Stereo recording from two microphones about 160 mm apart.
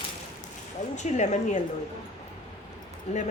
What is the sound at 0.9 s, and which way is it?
Speech, 50° left (ahead or behind).